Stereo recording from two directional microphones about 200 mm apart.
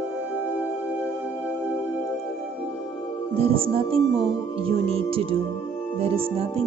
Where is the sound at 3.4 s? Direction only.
30° right (ahead or behind).